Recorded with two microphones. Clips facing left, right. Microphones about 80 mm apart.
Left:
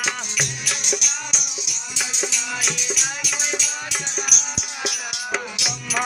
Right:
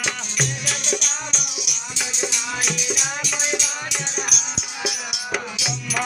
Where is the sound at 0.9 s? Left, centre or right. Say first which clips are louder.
Right 2 dB; centre.